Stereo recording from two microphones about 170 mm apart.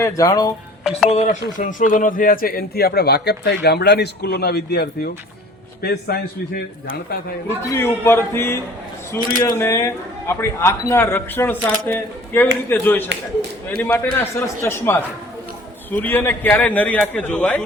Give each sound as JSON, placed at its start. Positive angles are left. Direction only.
{"t": 0.0, "sound": "speech", "side_deg": 20}
{"t": 0.9, "sound": "speech", "side_deg": -5}
{"t": 1.1, "sound": "a man's voice", "side_deg": 50}
{"t": 7.4, "sound": "speech", "side_deg": 15}